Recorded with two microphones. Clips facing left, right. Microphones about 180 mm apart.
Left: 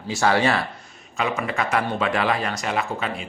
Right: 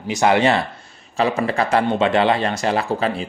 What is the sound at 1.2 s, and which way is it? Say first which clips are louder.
Speech: right 6 dB; 35° right (ahead or behind).